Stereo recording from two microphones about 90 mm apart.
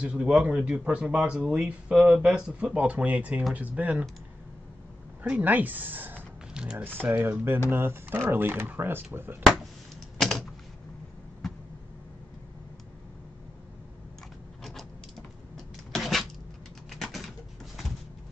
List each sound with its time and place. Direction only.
0.0 s speech: 10° right (ahead or behind)
1.9 s speech: 5° right (ahead or behind)
5.4 s speech: 20° right (ahead or behind)
6.5 s speech: 10° right (ahead or behind)
6.8 s speech: 25° right (ahead or behind)
10.1 s typing: 5° left (ahead or behind)
14.6 s a sound: centre (ahead or behind)
15.5 s vehicle: centre (ahead or behind)
16.9 s a sound: centre (ahead or behind)